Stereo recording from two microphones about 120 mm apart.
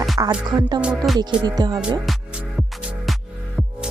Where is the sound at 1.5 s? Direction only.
35° right (ahead or behind).